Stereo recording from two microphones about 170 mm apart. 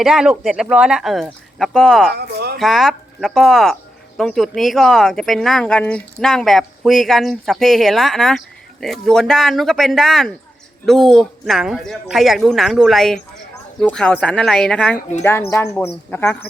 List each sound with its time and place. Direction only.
0.0 s speech: 5° right (ahead or behind)
2.1 s speech: 70° right (ahead or behind)
2.6 s speech: centre (ahead or behind)